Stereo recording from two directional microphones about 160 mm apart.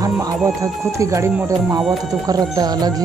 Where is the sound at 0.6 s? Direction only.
20° right (ahead or behind).